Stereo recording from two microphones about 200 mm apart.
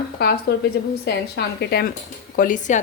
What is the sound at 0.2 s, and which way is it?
A woman's voice, 55° left (ahead or behind).